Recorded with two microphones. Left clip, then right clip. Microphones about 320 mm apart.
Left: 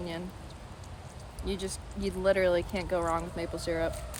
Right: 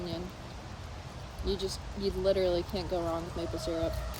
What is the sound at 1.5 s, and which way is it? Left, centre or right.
Speech, centre.